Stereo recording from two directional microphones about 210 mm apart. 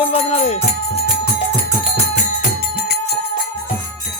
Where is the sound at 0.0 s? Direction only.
30° left (ahead or behind).